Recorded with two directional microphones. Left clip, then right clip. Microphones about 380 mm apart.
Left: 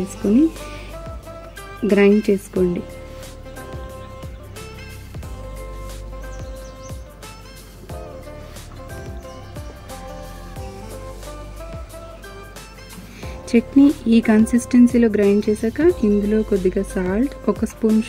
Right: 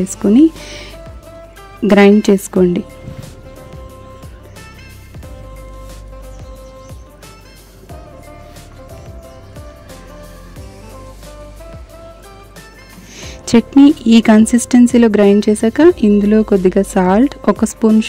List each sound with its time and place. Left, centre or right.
1.9 s speech: right
13.2 s speech: right